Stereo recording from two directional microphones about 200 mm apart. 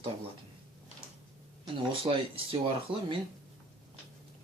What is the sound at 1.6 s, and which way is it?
Speech, 25° right (ahead or behind).